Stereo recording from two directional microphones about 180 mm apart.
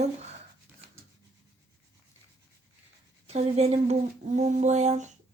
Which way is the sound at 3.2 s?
35° right (ahead or behind).